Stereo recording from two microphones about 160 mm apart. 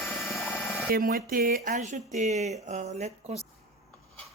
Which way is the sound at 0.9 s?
70° right (ahead or behind).